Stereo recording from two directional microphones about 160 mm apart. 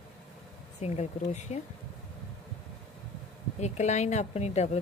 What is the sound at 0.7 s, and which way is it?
Speech, 45° left (ahead or behind).